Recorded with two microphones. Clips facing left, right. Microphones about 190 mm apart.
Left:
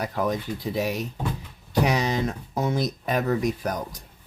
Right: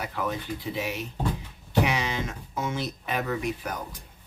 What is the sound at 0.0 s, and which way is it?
Speech, 40° left (ahead or behind).